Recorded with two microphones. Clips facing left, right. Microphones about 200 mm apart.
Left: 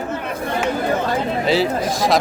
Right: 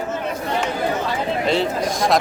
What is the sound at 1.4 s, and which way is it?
Speech, 5° left (ahead or behind).